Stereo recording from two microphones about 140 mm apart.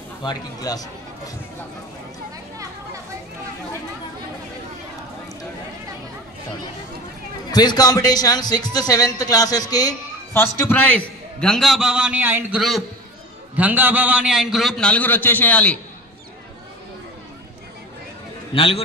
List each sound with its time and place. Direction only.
0.2 s a man's voice: 30° left (ahead or behind)
7.5 s a man's voice: 30° left (ahead or behind)
10.4 s a man's voice: 15° left (ahead or behind); by 12.5 s 15° right (ahead or behind)
12.5 s a man's voice: centre (ahead or behind)
13.6 s a man's voice: 10° right (ahead or behind); by 15.8 s 10° left (ahead or behind)
18.5 s a man's voice: 40° left (ahead or behind)